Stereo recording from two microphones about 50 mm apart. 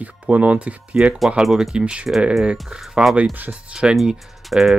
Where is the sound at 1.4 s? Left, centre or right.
Centre.